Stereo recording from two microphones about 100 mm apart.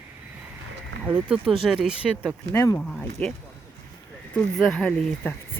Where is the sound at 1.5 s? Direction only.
Centre (ahead or behind).